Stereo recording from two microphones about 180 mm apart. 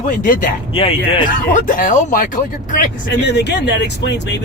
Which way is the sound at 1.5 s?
50° left (ahead or behind).